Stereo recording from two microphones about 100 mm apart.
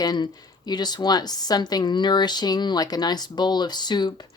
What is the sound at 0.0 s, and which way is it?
A woman's voice, 45° left (ahead or behind).